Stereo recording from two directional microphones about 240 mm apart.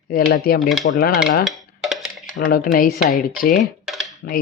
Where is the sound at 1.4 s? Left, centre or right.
Centre.